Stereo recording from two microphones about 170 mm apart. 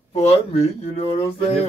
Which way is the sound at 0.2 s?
35° left (ahead or behind).